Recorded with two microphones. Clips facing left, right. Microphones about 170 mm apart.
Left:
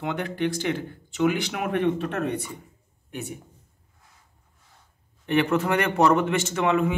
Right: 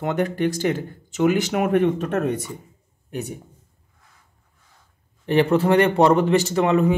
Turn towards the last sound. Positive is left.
turn(degrees=-35)  # may be behind; listen again after turning